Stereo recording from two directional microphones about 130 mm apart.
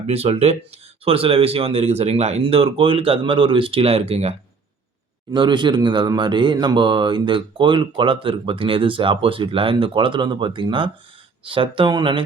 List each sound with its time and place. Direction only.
0.1 s speech: 50° right (ahead or behind)
5.3 s speech: 35° right (ahead or behind)